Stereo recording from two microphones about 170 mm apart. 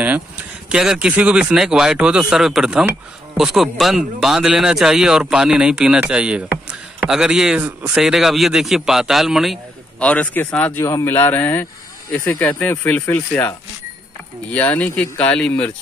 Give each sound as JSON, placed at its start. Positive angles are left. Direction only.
{"t": 0.7, "sound": "speech", "side_deg": -5}